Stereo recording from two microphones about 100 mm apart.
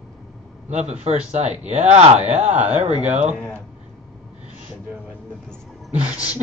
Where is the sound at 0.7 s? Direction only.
90° right.